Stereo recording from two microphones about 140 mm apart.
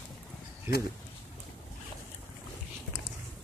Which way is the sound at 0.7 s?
20° right (ahead or behind).